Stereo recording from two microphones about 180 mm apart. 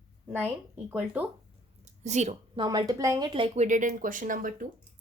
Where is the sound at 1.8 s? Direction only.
40° right (ahead or behind).